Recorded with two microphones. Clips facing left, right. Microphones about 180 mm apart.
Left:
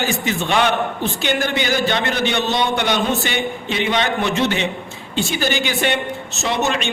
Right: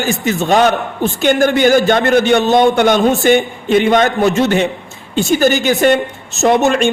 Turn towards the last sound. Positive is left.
turn(degrees=-50)  # may be behind; listen again after turning